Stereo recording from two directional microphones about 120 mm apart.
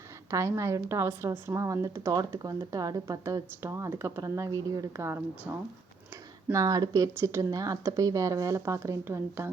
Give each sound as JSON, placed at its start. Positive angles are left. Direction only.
{"t": 0.3, "sound": "speech", "side_deg": -25}